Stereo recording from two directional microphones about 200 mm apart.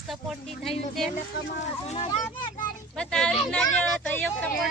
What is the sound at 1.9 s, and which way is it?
Speech, 25° left (ahead or behind).